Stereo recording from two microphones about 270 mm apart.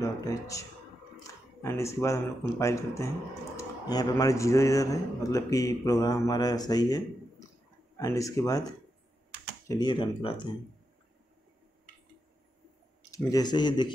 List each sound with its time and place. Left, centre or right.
0.0 s speech: centre
1.2 s a sound: centre
2.6 s speech: centre
9.7 s speech: centre
13.1 s speech: centre